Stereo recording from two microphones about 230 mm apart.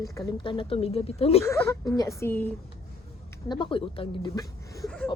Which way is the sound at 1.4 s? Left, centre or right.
Centre.